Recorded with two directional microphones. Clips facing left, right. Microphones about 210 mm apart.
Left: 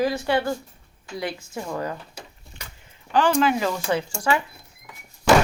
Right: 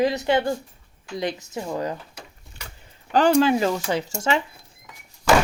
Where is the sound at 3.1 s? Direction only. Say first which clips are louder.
Right 3 dB; 40° right (ahead or behind).